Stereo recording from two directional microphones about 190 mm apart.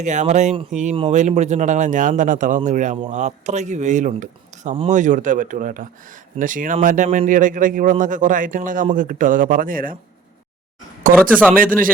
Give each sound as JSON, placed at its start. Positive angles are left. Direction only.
{"t": 0.0, "sound": "a man's voice", "side_deg": -40}
{"t": 11.5, "sound": "a man's voice", "side_deg": -45}